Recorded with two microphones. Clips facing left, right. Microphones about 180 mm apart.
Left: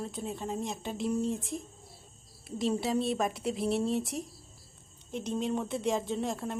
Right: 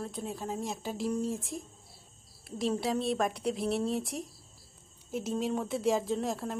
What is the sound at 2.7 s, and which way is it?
A woman's voice, centre (ahead or behind).